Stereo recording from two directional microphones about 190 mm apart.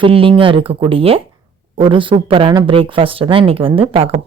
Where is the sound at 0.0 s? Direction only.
30° right (ahead or behind).